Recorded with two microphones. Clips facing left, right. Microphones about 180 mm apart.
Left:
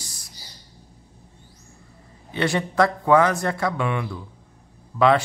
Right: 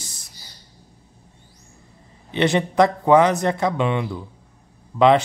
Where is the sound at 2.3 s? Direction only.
20° right (ahead or behind).